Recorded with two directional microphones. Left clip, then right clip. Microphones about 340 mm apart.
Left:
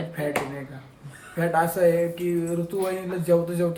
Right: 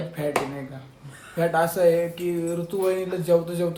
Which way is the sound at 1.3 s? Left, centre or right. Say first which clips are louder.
Right 1 dB; centre.